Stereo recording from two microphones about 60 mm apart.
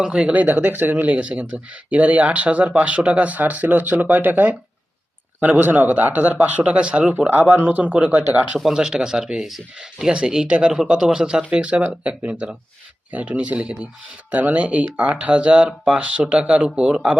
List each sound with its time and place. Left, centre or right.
0.0 s speech: centre
0.3 s speech: right
7.3 s speech: right
8.5 s speech: centre